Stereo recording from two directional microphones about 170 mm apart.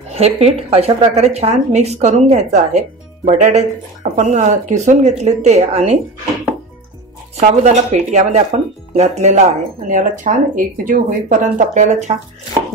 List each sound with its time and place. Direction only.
0.1 s a woman's voice: 35° right (ahead or behind)
7.3 s a woman's voice: 40° right (ahead or behind)